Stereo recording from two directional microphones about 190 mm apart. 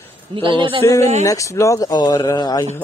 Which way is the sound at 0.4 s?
25° right (ahead or behind).